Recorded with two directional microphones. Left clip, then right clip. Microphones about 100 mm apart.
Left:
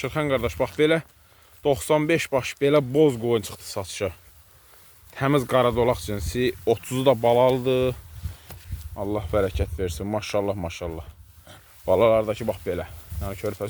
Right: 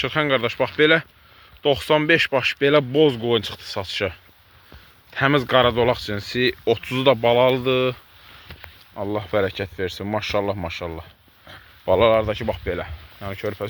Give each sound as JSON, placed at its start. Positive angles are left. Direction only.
{"t": 0.0, "sound": "speech", "side_deg": 15}
{"t": 9.0, "sound": "speech", "side_deg": 15}